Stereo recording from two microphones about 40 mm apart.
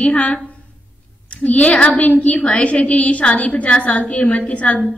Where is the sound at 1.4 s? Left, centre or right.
Left.